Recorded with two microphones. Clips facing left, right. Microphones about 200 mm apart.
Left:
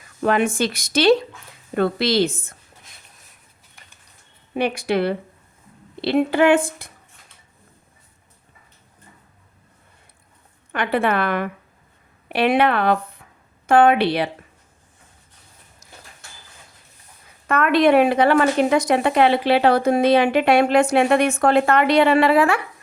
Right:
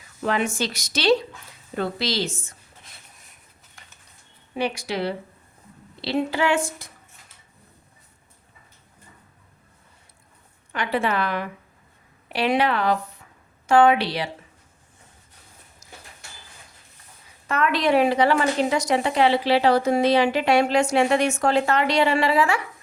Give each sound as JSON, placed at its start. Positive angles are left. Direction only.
{"t": 0.2, "sound": "a woman's voice", "side_deg": 55}
{"t": 4.5, "sound": "a woman's voice", "side_deg": 55}
{"t": 10.7, "sound": "a woman's voice", "side_deg": 60}
{"t": 17.5, "sound": "a woman's voice", "side_deg": 55}